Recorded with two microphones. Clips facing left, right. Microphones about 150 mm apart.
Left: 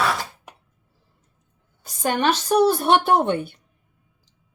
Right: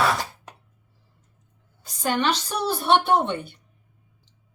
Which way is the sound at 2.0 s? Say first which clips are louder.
Left 3 dB; 50° left (ahead or behind).